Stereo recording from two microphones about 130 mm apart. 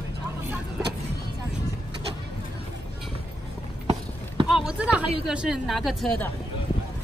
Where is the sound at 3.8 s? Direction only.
45° right (ahead or behind).